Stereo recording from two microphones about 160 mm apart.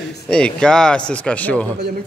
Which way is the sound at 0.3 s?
5° left (ahead or behind).